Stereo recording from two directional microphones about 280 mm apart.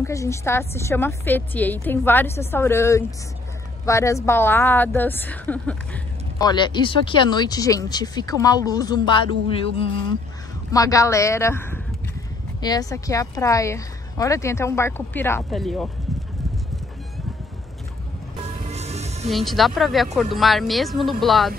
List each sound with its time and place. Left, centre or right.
0.0 s a woman's voice: centre
10.7 s a woman's voice: centre
18.4 s music: right
19.3 s speech: centre